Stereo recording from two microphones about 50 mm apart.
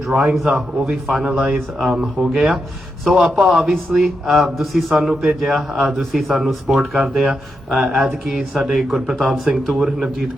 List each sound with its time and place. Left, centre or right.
0.1 s speech: centre